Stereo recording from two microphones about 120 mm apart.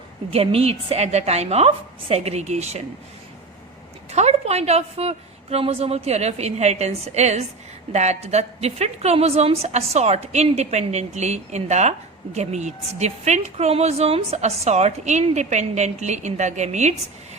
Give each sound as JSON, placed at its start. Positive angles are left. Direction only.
{"t": 0.3, "sound": "a woman's voice", "side_deg": -55}
{"t": 4.1, "sound": "a woman's voice", "side_deg": -65}